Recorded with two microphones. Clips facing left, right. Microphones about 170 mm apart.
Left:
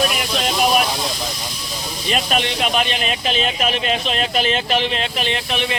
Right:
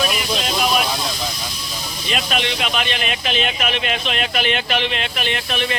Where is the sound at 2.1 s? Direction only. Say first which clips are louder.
Left 2 dB; 40° left (ahead or behind).